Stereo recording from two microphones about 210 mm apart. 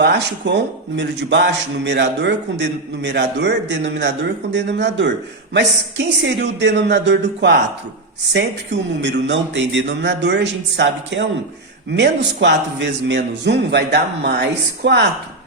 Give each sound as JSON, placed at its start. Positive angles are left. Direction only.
{"t": 0.0, "sound": "a man's voice", "side_deg": -55}
{"t": 6.2, "sound": "a man's voice", "side_deg": -55}